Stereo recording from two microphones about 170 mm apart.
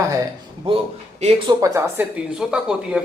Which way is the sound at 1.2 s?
35° right (ahead or behind).